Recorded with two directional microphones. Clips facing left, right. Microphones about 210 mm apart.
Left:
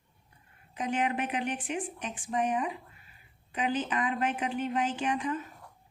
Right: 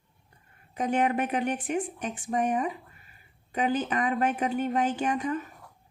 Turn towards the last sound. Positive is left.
turn(degrees=-40)  # may be behind; listen again after turning